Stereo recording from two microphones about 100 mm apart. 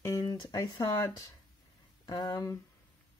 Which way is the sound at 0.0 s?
35° left (ahead or behind).